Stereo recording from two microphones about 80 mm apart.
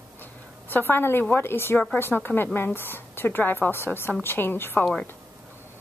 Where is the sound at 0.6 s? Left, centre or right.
Left.